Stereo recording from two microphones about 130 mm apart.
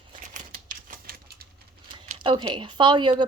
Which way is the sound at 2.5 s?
35° right (ahead or behind).